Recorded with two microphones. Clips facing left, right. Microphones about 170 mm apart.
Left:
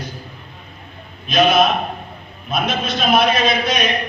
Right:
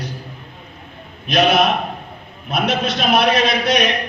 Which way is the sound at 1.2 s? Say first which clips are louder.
Left 1 dB; 70° right (ahead or behind).